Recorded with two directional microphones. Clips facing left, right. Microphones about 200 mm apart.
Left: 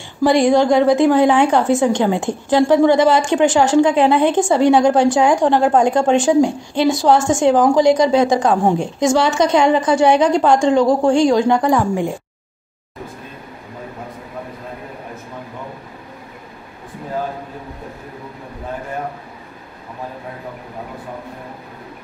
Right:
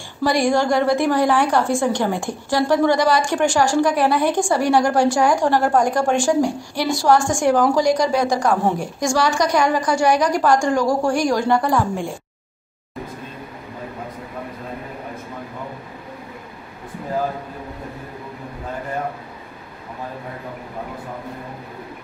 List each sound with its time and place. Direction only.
0.2 s a woman's voice: 20° left (ahead or behind)